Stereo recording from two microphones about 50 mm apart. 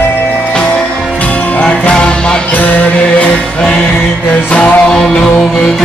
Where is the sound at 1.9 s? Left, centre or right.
Centre.